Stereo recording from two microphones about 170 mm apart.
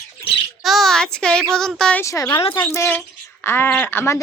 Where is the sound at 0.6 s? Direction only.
Centre (ahead or behind).